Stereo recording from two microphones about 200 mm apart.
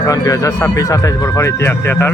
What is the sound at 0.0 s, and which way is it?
Speech, 15° left (ahead or behind).